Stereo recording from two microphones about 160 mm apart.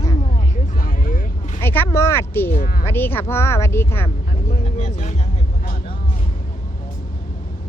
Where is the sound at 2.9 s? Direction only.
15° left (ahead or behind).